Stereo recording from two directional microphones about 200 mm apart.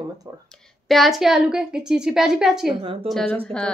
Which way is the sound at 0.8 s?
Centre (ahead or behind).